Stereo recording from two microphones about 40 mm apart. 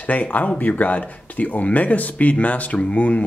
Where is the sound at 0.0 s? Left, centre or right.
Left.